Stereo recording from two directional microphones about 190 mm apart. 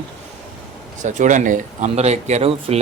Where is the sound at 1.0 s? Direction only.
40° right (ahead or behind).